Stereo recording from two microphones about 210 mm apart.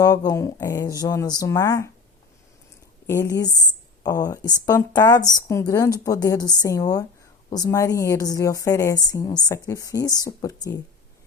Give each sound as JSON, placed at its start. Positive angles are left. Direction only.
{"t": 0.0, "sound": "a woman's voice", "side_deg": 15}
{"t": 3.1, "sound": "a woman's voice", "side_deg": 15}